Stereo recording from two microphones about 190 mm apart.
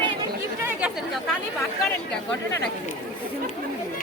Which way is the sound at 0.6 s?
10° right (ahead or behind).